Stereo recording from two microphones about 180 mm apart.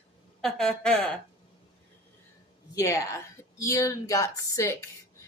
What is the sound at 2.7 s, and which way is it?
A woman's voice, 15° left (ahead or behind).